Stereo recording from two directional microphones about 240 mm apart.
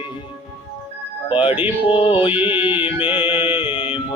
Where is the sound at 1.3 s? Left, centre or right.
Left.